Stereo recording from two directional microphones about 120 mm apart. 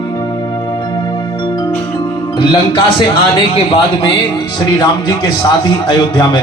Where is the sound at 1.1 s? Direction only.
35° left (ahead or behind).